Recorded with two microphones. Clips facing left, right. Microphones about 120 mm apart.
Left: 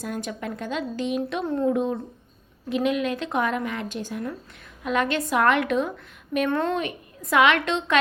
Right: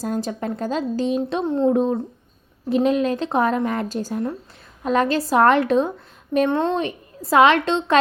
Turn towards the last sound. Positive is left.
turn(degrees=-30)  # may be behind; listen again after turning